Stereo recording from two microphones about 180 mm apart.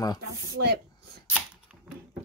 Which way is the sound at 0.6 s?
90° right.